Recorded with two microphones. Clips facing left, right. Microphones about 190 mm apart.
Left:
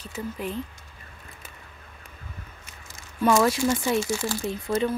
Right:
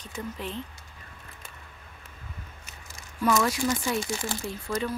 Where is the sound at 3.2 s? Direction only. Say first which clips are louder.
Left 4 dB; 25° left (ahead or behind).